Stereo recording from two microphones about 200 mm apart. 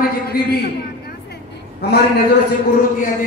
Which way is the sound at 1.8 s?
55° left (ahead or behind).